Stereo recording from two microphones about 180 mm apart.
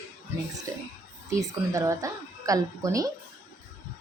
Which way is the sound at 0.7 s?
15° right (ahead or behind).